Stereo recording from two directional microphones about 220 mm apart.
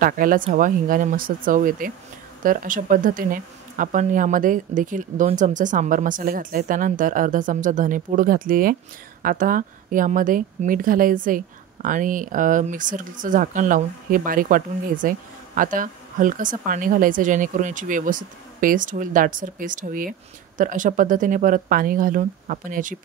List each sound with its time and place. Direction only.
0.0 s speech: 40° right (ahead or behind)